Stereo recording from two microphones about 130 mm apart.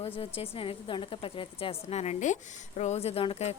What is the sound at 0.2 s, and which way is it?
A woman's voice, 45° left (ahead or behind).